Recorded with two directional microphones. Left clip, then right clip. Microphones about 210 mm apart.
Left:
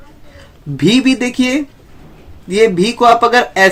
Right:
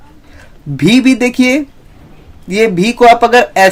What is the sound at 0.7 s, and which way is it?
Speech, 30° right (ahead or behind).